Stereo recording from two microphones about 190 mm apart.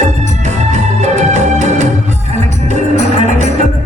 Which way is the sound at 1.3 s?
40° right (ahead or behind).